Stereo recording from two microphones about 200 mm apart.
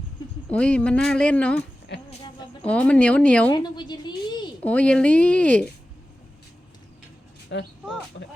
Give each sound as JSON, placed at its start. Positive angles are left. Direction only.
{"t": 0.4, "sound": "speech", "side_deg": 5}
{"t": 2.0, "sound": "a sound", "side_deg": 30}
{"t": 2.6, "sound": "speech", "side_deg": 5}
{"t": 3.5, "sound": "a woman's voice", "side_deg": 20}
{"t": 4.6, "sound": "speech", "side_deg": 5}
{"t": 7.5, "sound": "speech", "side_deg": 55}